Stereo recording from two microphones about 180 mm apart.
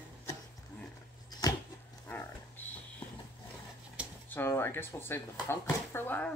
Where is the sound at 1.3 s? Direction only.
20° left (ahead or behind).